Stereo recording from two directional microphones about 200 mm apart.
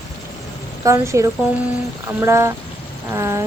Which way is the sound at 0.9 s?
15° right (ahead or behind).